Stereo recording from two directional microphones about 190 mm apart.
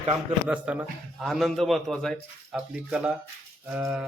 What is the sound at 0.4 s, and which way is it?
A man's voice, 5° right (ahead or behind).